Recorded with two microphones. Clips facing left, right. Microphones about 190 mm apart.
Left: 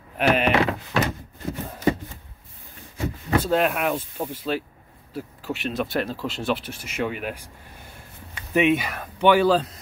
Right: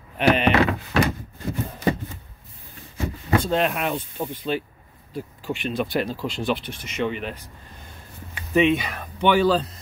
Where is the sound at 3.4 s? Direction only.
5° left (ahead or behind).